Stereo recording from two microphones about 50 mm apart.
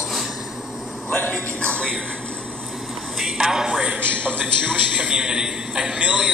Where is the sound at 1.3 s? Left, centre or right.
Left.